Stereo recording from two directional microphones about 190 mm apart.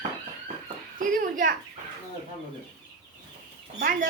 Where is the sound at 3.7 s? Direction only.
55° right (ahead or behind).